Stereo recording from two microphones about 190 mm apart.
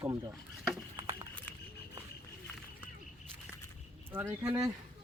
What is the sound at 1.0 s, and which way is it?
Clip-clop, 15° right (ahead or behind).